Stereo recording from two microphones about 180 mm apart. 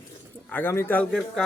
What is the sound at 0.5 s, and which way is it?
Speech, 10° left (ahead or behind).